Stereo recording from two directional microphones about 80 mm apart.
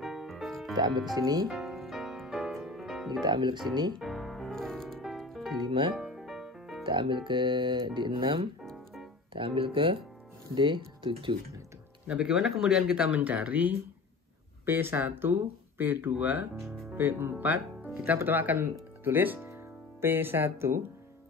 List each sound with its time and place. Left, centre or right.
0.0 s music: centre
1.1 s speech: right
1.5 s music: centre
3.1 s speech: right
3.9 s music: centre
5.6 s music: right
5.9 s music: centre
6.8 s speech: right
12.1 s speech: centre
19.5 s music: right